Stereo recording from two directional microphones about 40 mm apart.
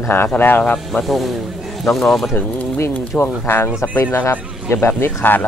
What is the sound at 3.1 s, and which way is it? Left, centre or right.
A man's voice, left.